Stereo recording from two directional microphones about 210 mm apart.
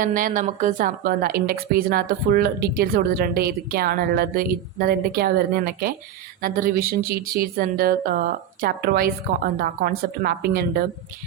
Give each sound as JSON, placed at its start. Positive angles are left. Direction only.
{"t": 0.0, "sound": "speech", "side_deg": -40}